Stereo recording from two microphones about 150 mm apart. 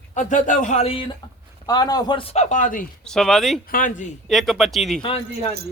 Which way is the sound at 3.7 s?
60° left (ahead or behind).